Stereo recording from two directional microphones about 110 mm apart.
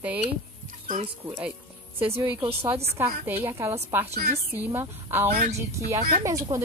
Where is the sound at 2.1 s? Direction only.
20° right (ahead or behind).